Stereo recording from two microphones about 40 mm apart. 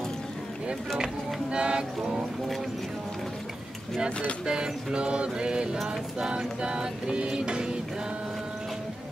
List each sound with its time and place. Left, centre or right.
0.7 s speech: right
4.5 s music: right